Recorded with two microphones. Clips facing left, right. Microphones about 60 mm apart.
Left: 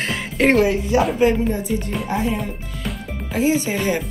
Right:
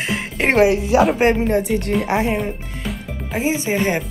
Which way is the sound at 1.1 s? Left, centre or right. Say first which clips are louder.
Right 2 dB; right.